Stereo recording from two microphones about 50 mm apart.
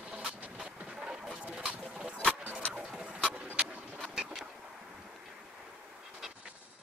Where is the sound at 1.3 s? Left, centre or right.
Right.